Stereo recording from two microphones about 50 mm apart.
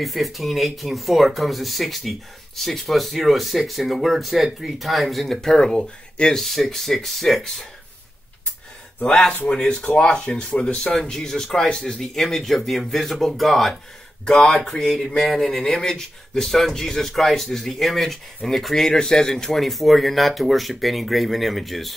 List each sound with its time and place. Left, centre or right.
0.0 s speech: centre
6.3 s speech: centre
9.0 s speech: centre